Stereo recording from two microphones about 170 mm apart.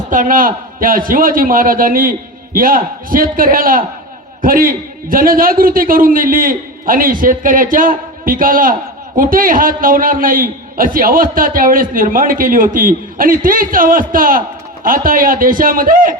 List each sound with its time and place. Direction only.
0.1 s a man's voice: 50° right (ahead or behind)